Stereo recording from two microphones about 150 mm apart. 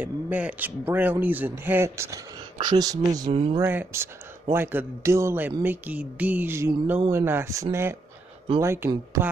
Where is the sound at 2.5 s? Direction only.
30° right (ahead or behind).